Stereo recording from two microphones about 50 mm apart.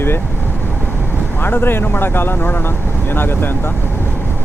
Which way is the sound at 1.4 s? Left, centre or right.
Left.